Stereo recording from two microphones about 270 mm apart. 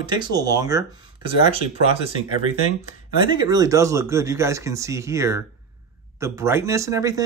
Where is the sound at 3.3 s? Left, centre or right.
Centre.